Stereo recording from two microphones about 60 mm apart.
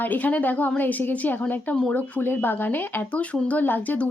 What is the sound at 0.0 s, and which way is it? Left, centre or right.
A woman's voice, left.